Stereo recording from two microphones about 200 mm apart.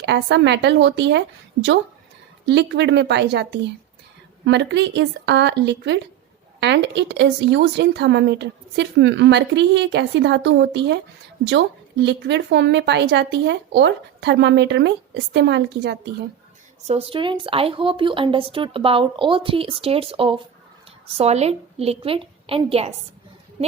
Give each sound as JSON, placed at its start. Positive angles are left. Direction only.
{"t": 0.0, "sound": "a woman's voice", "side_deg": -60}
{"t": 2.5, "sound": "a woman's voice", "side_deg": -60}
{"t": 16.8, "sound": "speech", "side_deg": -30}